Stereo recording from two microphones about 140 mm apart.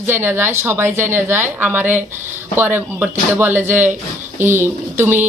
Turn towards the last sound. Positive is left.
turn(degrees=-15)  # may be behind; listen again after turning